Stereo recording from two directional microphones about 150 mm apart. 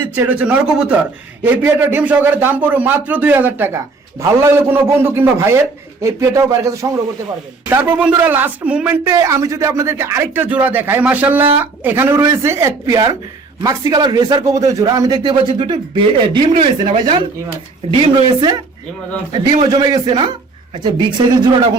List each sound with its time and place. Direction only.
0.0 s speech: 10° right (ahead or behind)
7.7 s speech: 10° right (ahead or behind)
9.0 s a man's voice: 20° right (ahead or behind)